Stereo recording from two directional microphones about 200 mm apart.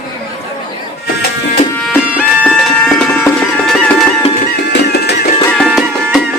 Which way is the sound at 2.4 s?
Centre (ahead or behind).